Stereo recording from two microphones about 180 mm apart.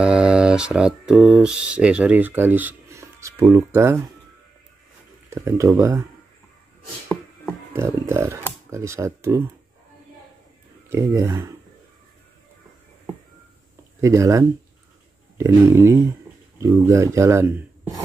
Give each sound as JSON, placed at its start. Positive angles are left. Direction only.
{"t": 0.0, "sound": "speech", "side_deg": -5}
{"t": 5.3, "sound": "speech", "side_deg": -15}
{"t": 7.7, "sound": "speech", "side_deg": -15}
{"t": 10.9, "sound": "speech", "side_deg": -15}
{"t": 14.0, "sound": "speech", "side_deg": -15}